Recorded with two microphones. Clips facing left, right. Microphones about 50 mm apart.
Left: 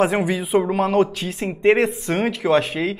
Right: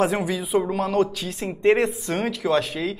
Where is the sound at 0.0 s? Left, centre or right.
Left.